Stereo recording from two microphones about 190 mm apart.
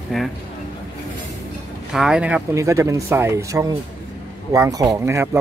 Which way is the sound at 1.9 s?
5° right (ahead or behind).